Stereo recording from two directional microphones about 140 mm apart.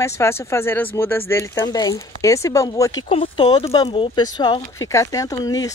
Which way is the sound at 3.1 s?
40° left (ahead or behind).